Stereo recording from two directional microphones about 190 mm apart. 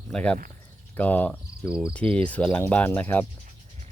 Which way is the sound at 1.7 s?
5° right (ahead or behind).